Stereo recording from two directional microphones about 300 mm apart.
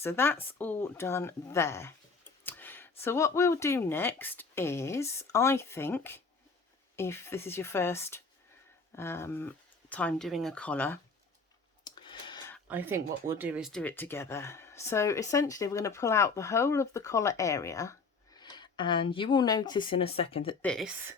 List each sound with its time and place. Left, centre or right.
0.0 s speech: centre
2.4 s clicking: centre
3.0 s speech: centre
11.9 s a sound: centre
12.6 s speech: centre
20.6 s speech: centre